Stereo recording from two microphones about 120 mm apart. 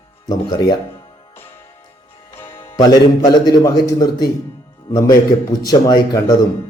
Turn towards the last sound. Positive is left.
turn(degrees=35)  # may be behind; listen again after turning